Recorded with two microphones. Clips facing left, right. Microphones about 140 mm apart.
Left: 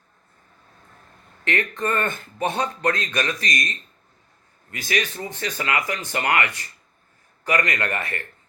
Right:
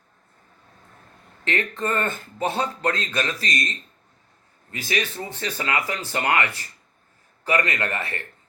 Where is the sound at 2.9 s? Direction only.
30° right (ahead or behind).